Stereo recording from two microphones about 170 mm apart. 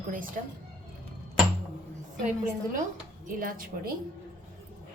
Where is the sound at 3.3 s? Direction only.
55° right (ahead or behind).